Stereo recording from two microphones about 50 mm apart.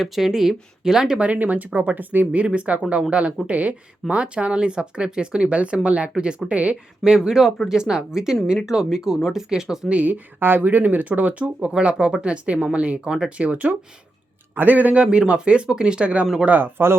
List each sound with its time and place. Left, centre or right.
0.0 s speech: centre
1.2 s speech: right
7.2 s speech: centre
9.9 s speech: right
13.1 s speech: centre
13.3 s speech: right
16.6 s speech: right